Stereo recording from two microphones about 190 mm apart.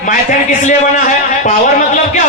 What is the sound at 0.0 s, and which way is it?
A man's voice, 40° left (ahead or behind).